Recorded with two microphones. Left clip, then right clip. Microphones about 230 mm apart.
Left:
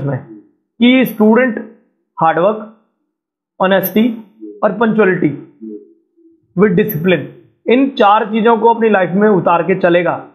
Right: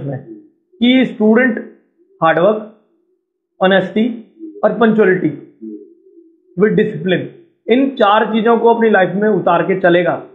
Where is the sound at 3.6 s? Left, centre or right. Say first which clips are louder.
Even; left.